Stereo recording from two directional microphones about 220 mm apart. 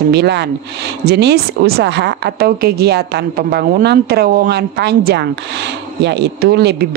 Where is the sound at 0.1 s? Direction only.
50° right (ahead or behind).